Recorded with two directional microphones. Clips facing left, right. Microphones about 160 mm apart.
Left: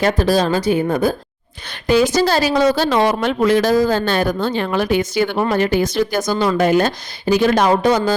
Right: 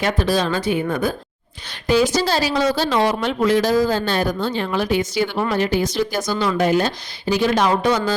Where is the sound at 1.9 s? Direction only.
55° left (ahead or behind).